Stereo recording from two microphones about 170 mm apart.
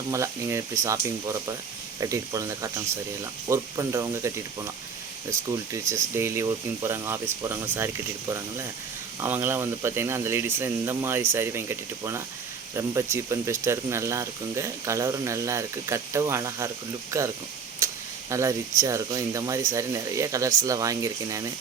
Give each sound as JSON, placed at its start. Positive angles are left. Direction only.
{"t": 0.1, "sound": "speech", "side_deg": -15}
{"t": 17.8, "sound": "a sound", "side_deg": -15}
{"t": 18.3, "sound": "speech", "side_deg": -15}